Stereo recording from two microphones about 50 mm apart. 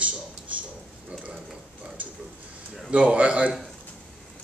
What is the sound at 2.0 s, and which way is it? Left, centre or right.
A man's voice, right.